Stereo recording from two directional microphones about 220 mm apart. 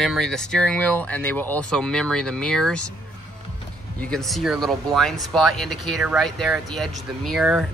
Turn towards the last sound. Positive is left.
turn(degrees=0)  # may be behind; listen again after turning